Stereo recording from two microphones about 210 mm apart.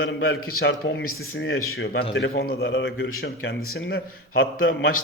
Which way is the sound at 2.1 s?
50° left (ahead or behind).